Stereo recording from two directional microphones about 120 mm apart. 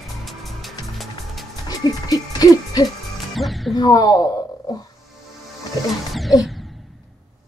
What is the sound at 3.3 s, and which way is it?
Speech, centre (ahead or behind).